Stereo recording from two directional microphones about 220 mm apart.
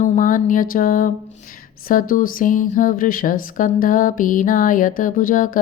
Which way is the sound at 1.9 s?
40° left (ahead or behind).